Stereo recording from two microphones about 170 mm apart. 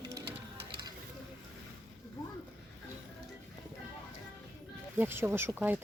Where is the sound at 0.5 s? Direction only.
25° right (ahead or behind).